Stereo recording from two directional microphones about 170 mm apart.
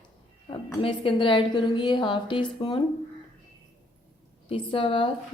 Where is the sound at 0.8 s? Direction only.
30° left (ahead or behind).